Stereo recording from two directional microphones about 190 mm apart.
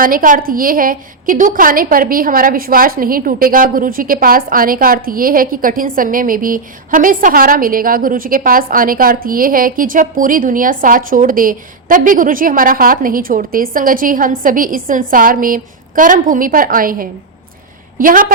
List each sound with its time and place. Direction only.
0.0 s a woman's voice: 45° right (ahead or behind)